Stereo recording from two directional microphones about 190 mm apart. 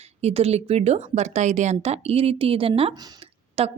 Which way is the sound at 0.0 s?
35° right (ahead or behind).